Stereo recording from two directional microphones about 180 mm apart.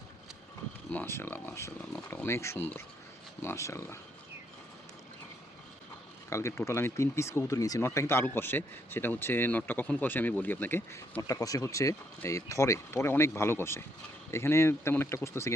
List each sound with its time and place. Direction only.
0.9 s speech: 10° left (ahead or behind)
6.3 s speech: 15° left (ahead or behind)